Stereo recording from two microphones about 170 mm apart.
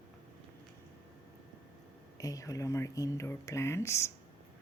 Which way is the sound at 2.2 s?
20° left (ahead or behind).